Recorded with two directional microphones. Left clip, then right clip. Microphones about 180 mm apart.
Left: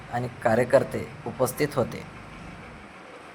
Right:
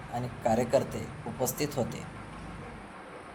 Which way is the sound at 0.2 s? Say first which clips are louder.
Left 5 dB; 15° left (ahead or behind).